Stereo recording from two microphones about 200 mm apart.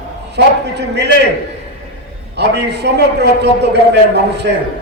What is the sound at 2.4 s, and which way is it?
A man's voice, 60° right (ahead or behind).